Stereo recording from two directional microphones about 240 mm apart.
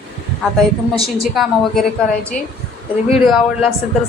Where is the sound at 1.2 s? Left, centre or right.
Centre.